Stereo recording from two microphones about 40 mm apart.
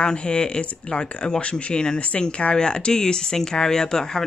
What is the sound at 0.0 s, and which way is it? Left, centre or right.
Speech, left.